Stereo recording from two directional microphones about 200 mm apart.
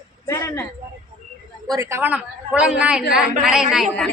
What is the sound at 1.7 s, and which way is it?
A man's voice, 15° right (ahead or behind).